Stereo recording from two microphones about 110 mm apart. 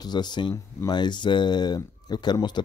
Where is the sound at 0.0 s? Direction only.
40° left (ahead or behind).